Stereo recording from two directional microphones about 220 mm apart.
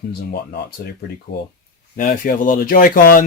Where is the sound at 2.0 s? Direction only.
35° left (ahead or behind).